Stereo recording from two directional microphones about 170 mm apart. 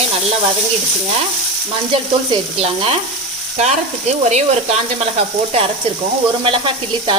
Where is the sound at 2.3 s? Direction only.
35° right (ahead or behind).